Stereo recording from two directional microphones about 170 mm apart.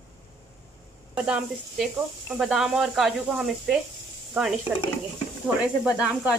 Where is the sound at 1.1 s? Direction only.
5° right (ahead or behind).